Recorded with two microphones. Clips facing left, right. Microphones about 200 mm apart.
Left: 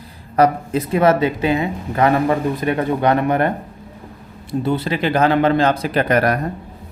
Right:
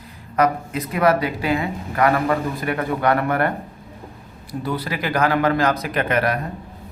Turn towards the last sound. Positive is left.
turn(degrees=40)  # may be behind; listen again after turning